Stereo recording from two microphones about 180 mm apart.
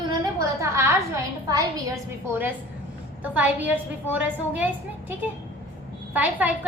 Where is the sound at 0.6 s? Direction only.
15° right (ahead or behind).